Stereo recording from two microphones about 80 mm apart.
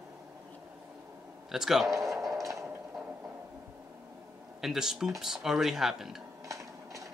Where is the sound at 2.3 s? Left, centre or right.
Right.